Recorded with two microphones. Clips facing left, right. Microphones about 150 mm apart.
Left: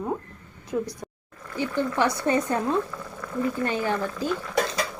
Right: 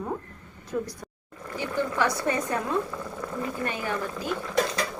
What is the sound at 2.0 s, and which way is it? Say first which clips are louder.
Speech: left 4 dB; 25° left (ahead or behind).